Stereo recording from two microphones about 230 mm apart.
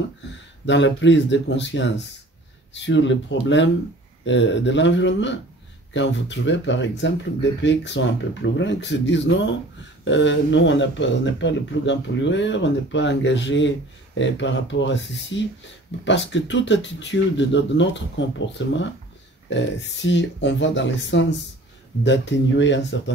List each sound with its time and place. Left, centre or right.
0.7 s speech: left